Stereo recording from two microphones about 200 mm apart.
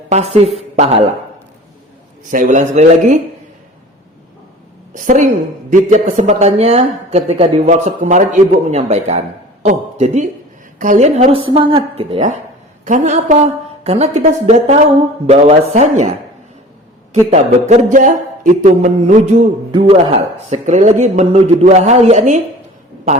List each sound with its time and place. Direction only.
0.1 s speech: 30° right (ahead or behind)
2.3 s speech: 40° right (ahead or behind)
4.9 s a woman's voice: 40° right (ahead or behind)
17.3 s speech: 35° right (ahead or behind)